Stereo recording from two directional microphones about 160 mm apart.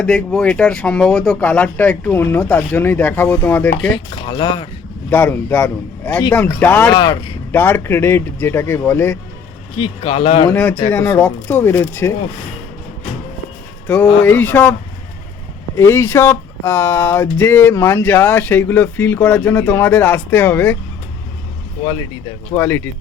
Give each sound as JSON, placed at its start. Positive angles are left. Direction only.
{"t": 0.0, "sound": "speech", "side_deg": 5}
{"t": 3.9, "sound": "speech", "side_deg": 30}
{"t": 5.1, "sound": "speech", "side_deg": 15}
{"t": 6.9, "sound": "speech", "side_deg": 25}
{"t": 7.5, "sound": "speech", "side_deg": 10}
{"t": 9.7, "sound": "speech", "side_deg": 35}
{"t": 10.5, "sound": "speech", "side_deg": 10}
{"t": 13.8, "sound": "speech", "side_deg": 10}
{"t": 15.8, "sound": "speech", "side_deg": 15}
{"t": 22.5, "sound": "speech", "side_deg": 15}